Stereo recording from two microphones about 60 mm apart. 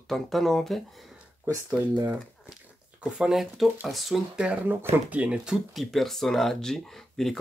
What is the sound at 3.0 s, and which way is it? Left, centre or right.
Speech, centre.